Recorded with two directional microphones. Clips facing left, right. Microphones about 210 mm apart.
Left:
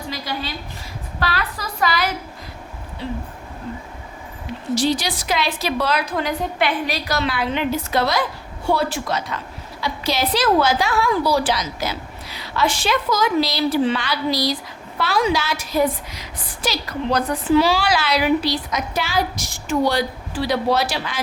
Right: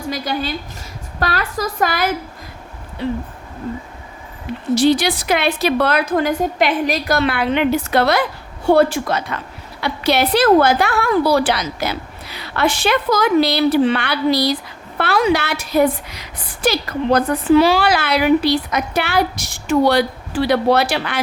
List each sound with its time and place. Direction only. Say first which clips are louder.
0.1 s a woman's voice: right 7 dB; 50° right (ahead or behind)
4.7 s a woman's voice: right 6 dB; 60° right (ahead or behind)